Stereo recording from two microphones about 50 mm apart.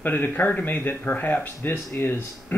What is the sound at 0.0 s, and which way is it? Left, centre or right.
Speech, left.